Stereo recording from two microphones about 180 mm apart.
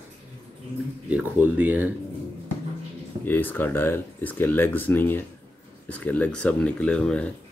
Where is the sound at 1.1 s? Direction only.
10° right (ahead or behind).